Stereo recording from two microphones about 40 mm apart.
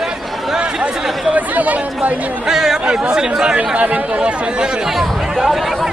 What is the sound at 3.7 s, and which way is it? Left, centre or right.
Speech, right.